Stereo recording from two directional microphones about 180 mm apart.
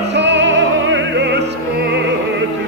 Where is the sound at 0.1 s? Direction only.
75° right (ahead or behind).